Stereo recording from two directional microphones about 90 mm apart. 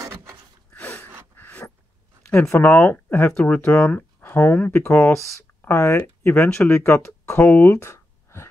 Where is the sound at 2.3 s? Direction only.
25° left (ahead or behind).